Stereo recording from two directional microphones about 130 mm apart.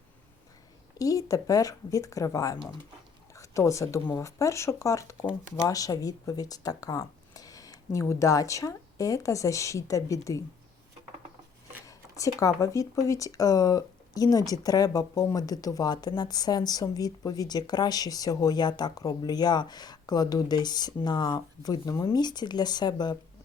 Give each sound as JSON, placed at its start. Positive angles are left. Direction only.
{"t": 0.9, "sound": "speech", "side_deg": 25}
{"t": 11.9, "sound": "speech", "side_deg": 25}